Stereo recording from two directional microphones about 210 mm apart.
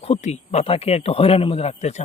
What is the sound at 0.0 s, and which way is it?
Speech, 30° left (ahead or behind).